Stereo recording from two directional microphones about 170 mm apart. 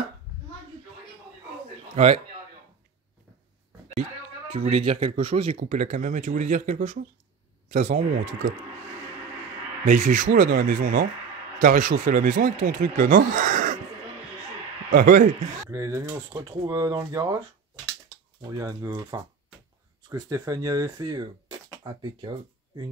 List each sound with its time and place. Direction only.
2.0 s speech: 40° right (ahead or behind)
4.5 s speech: 35° right (ahead or behind)
5.7 s speech: 45° right (ahead or behind)
9.8 s speech: 50° right (ahead or behind)
15.0 s speech: 50° right (ahead or behind)
15.7 s speech: 20° right (ahead or behind)
18.4 s speech: 20° right (ahead or behind)